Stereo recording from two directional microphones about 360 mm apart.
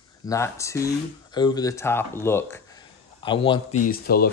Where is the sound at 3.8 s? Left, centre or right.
Left.